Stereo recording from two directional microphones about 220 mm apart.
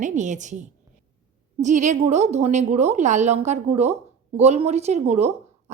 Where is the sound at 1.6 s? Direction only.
35° right (ahead or behind).